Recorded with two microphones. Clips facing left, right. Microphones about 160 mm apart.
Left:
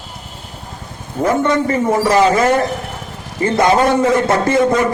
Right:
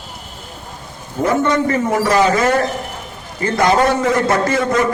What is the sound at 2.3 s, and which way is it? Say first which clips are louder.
A man's voice: left 2 dB; 25° left (ahead or behind).